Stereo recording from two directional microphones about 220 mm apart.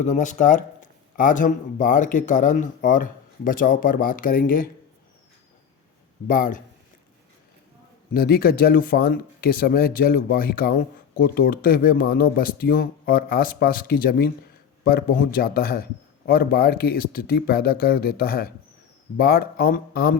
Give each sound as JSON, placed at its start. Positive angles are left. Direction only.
{"t": 0.0, "sound": "speech", "side_deg": 35}
{"t": 6.2, "sound": "speech", "side_deg": 40}
{"t": 8.1, "sound": "a man's voice", "side_deg": 45}